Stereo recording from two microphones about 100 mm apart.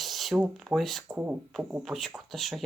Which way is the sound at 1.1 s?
20° right (ahead or behind).